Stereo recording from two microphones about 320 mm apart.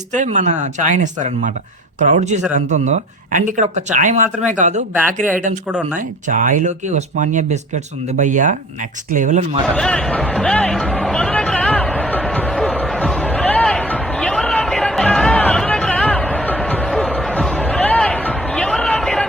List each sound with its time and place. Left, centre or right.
0.1 s speech: right
6.2 s speech: right
9.6 s music: centre